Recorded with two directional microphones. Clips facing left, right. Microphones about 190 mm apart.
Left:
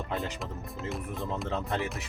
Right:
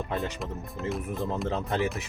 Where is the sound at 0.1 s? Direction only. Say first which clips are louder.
Right 2 dB; centre (ahead or behind).